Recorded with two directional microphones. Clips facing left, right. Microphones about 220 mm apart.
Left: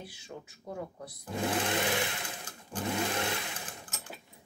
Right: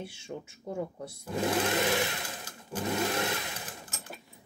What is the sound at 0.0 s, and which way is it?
Speech, 25° right (ahead or behind).